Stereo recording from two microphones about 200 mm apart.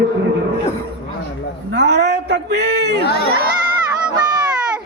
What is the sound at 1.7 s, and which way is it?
A man's voice, 55° right (ahead or behind).